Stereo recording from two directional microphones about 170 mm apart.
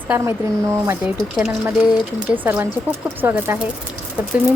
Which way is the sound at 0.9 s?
5° right (ahead or behind).